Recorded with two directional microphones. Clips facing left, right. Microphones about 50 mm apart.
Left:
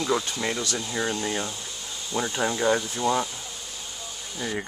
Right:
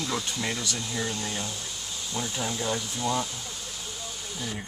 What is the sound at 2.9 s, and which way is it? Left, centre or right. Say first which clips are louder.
Speech: left 4 dB; left.